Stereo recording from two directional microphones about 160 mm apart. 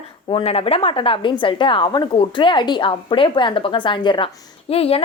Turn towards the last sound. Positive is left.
turn(degrees=40)  # may be behind; listen again after turning